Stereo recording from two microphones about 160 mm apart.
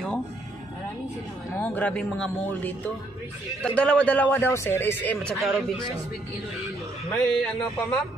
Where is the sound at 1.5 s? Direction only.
10° left (ahead or behind).